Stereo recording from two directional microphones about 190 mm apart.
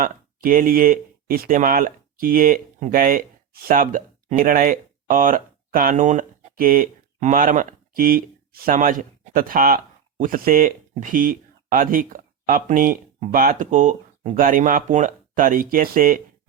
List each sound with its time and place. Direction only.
0.0 s speech: 45° right (ahead or behind)